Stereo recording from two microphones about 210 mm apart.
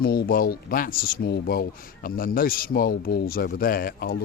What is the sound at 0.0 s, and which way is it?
Speech, 45° left (ahead or behind).